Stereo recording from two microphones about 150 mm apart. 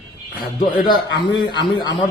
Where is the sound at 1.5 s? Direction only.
30° left (ahead or behind).